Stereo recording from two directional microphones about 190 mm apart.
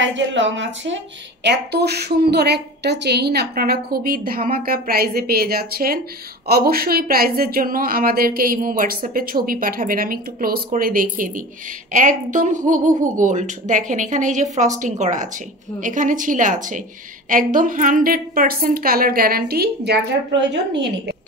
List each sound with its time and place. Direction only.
0.0 s speech: 75° right (ahead or behind)
1.4 s speech: 60° right (ahead or behind)